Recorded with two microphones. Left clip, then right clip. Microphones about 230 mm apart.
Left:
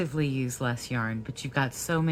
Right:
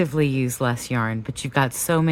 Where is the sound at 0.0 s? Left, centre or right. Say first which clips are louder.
Right 8 dB; right.